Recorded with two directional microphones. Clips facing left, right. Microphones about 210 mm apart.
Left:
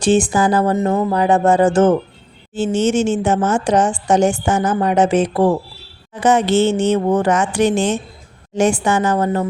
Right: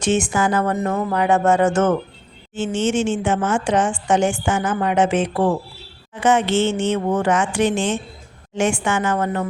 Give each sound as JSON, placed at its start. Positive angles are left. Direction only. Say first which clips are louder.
{"t": 0.0, "sound": "a woman's voice", "louder": "left 5 dB", "side_deg": 35}